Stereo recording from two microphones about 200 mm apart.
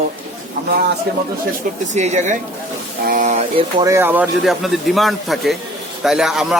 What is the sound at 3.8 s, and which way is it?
Speech, 15° right (ahead or behind).